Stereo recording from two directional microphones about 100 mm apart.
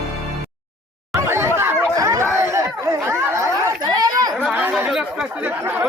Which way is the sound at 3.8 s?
40° right (ahead or behind).